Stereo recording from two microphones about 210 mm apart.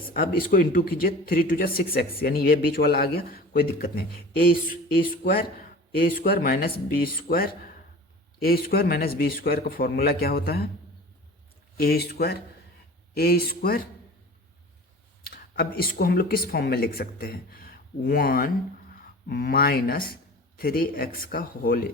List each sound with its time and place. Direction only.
0.1 s speech: 45° left (ahead or behind)
11.8 s speech: 50° left (ahead or behind)
15.2 s speech: 45° left (ahead or behind)